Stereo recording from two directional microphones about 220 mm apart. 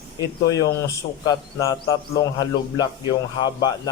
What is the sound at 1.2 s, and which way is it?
A man's voice, 15° left (ahead or behind).